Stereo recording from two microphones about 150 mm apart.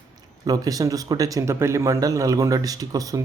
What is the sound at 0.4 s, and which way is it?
Speech, 25° right (ahead or behind).